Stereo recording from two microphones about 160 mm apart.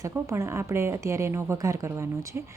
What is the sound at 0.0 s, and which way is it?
A woman's voice, 20° right (ahead or behind).